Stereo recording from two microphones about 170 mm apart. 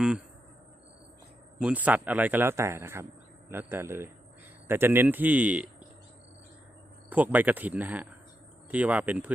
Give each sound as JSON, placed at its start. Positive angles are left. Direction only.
{"t": 1.5, "sound": "speech", "side_deg": -10}
{"t": 7.1, "sound": "speech", "side_deg": -10}